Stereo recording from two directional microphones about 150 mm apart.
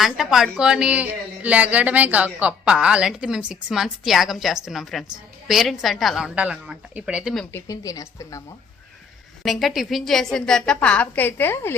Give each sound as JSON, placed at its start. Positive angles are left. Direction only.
{"t": 0.0, "sound": "a woman's voice", "side_deg": 0}
{"t": 7.5, "sound": "a woman's voice", "side_deg": 25}
{"t": 9.4, "sound": "a woman's voice", "side_deg": 0}